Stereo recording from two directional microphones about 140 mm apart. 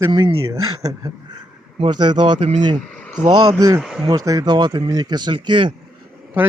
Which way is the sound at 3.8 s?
Centre (ahead or behind).